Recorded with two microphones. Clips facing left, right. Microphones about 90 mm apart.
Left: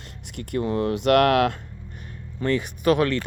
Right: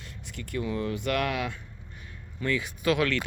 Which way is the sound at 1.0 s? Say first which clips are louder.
Left 14 dB; 80° left.